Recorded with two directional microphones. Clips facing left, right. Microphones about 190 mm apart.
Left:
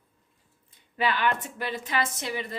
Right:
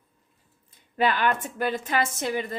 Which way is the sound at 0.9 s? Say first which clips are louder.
Right 3 dB; 45° right (ahead or behind).